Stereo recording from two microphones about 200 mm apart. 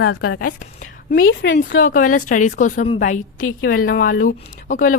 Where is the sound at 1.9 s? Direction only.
45° left (ahead or behind).